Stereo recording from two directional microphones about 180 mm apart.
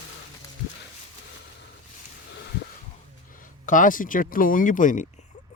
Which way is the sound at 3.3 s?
45° left (ahead or behind).